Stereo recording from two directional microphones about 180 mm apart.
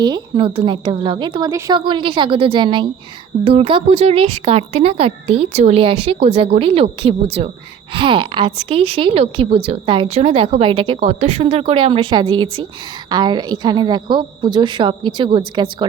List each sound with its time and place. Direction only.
0.0 s a woman's voice: 25° right (ahead or behind)